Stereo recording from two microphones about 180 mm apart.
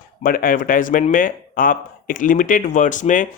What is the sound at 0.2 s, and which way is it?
Speech, 50° left (ahead or behind).